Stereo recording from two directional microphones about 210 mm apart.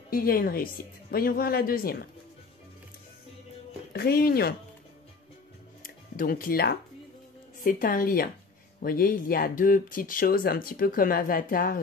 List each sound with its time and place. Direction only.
0.1 s speech: 45° left (ahead or behind)
3.9 s speech: 50° left (ahead or behind)
5.8 s music: 40° left (ahead or behind)
7.6 s speech: 40° left (ahead or behind)